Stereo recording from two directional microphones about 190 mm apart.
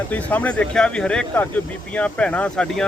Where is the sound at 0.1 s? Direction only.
10° left (ahead or behind).